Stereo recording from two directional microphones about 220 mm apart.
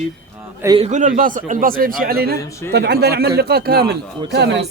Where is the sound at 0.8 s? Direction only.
35° right (ahead or behind).